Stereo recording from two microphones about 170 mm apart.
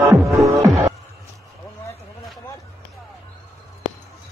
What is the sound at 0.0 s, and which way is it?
Music, 15° right (ahead or behind).